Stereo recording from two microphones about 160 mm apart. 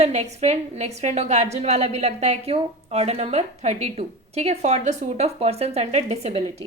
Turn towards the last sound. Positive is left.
turn(degrees=-40)  # may be behind; listen again after turning